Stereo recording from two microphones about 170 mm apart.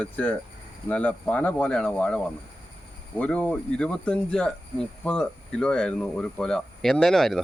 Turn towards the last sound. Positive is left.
turn(degrees=0)  # may be behind; listen again after turning